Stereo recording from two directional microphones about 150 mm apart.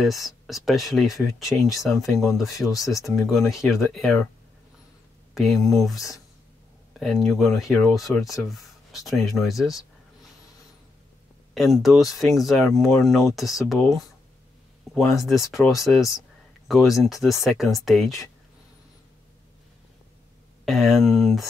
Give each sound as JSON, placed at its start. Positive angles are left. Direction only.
{"t": 0.0, "sound": "speech", "side_deg": 0}
{"t": 2.7, "sound": "speech", "side_deg": 20}
{"t": 3.2, "sound": "speech", "side_deg": 0}
{"t": 5.3, "sound": "speech", "side_deg": 0}
{"t": 11.5, "sound": "speech", "side_deg": 0}
{"t": 15.1, "sound": "speech", "side_deg": 0}
{"t": 20.6, "sound": "speech", "side_deg": 0}